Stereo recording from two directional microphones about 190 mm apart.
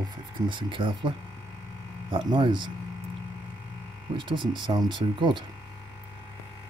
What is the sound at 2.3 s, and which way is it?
Speech, 25° right (ahead or behind).